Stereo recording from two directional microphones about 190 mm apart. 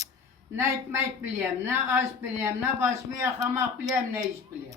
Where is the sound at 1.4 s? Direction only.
15° right (ahead or behind).